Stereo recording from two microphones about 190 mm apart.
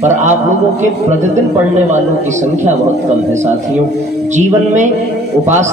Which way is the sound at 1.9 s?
40° right (ahead or behind).